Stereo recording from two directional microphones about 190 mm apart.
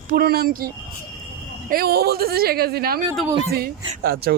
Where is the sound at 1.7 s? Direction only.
55° right (ahead or behind).